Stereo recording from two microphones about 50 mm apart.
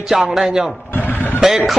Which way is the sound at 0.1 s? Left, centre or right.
Centre.